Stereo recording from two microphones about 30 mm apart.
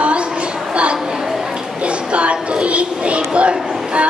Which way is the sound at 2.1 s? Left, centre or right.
Right.